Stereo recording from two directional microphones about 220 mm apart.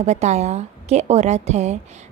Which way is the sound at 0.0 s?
30° right (ahead or behind).